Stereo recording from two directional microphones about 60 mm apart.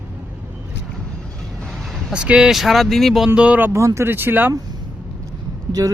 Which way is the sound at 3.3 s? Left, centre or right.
Centre.